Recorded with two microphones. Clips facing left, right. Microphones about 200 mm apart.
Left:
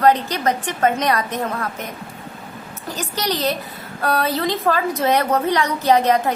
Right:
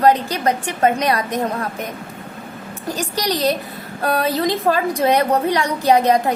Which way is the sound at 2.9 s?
15° right (ahead or behind).